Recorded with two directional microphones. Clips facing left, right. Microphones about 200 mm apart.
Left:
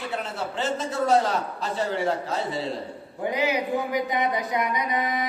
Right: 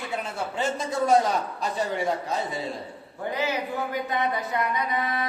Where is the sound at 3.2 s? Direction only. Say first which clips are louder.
Left 3 dB; 15° left (ahead or behind).